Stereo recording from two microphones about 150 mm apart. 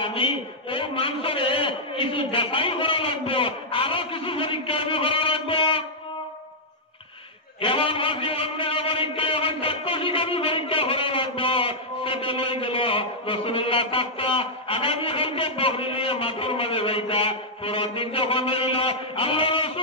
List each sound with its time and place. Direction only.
0.0 s a man's voice: 35° left (ahead or behind)
7.6 s a man's voice: 35° left (ahead or behind)